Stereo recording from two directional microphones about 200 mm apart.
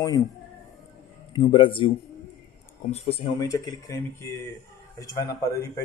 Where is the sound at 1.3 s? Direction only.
25° left (ahead or behind).